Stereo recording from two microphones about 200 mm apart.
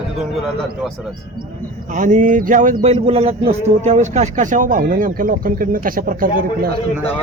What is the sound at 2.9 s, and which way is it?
A man's voice, 30° right (ahead or behind).